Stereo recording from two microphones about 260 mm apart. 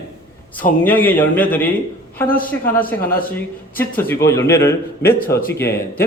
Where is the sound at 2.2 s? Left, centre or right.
Left.